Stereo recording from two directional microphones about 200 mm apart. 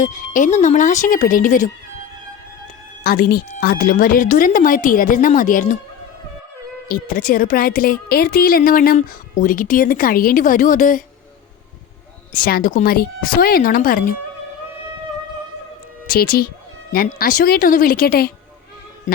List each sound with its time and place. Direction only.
0.0 s speech: 40° left (ahead or behind)
3.0 s a woman's voice: 50° left (ahead or behind)
6.8 s a woman's voice: 45° left (ahead or behind)
12.3 s a woman's voice: 45° left (ahead or behind)
16.1 s a woman's voice: 50° left (ahead or behind)